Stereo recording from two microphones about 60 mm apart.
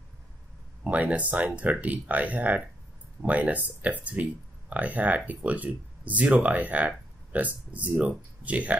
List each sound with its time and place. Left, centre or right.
0.8 s speech: right